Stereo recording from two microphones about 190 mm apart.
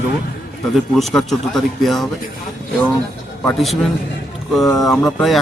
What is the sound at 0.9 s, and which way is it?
Speech, centre (ahead or behind).